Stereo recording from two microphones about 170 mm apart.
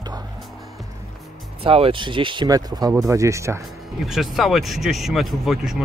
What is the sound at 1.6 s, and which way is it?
Speech, 35° right (ahead or behind).